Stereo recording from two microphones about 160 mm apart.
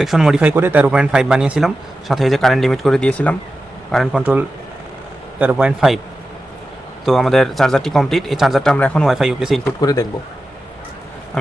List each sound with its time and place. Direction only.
0.0 s speech: centre (ahead or behind)
4.2 s speech: 10° right (ahead or behind)
7.0 s speech: centre (ahead or behind)
9.8 s speech: 25° left (ahead or behind)